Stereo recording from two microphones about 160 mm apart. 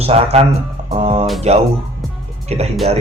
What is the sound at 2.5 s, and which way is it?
Speech, 40° right (ahead or behind).